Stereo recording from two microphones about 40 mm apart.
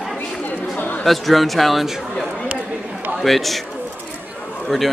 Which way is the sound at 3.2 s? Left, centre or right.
Centre.